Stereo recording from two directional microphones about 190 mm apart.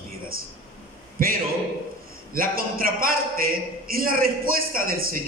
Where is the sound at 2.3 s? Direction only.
50° right (ahead or behind).